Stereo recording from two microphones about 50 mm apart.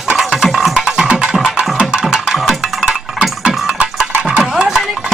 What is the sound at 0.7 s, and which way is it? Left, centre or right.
Music, centre.